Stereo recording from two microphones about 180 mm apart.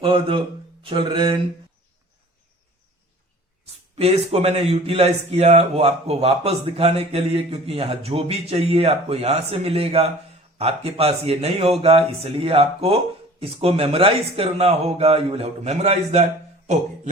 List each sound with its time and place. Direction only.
0.0 s speech: 30° right (ahead or behind)
3.9 s speech: 35° right (ahead or behind)